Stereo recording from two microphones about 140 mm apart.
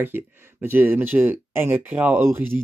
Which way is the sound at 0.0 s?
15° right (ahead or behind).